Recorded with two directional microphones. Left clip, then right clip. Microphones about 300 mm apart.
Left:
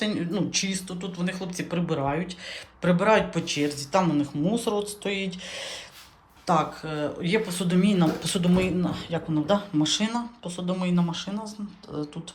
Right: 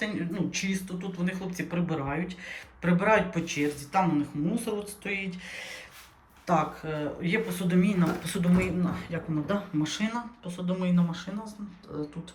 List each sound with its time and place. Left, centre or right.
0.0 s speech: centre
4.5 s speech: left
5.0 s speech: centre